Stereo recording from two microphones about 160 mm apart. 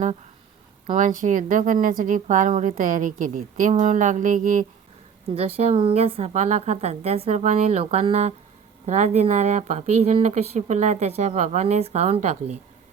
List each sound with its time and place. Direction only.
0.9 s speech: 55° right (ahead or behind)
5.3 s a woman's voice: 40° right (ahead or behind)